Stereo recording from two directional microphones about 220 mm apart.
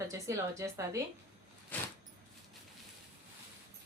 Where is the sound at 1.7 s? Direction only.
5° left (ahead or behind).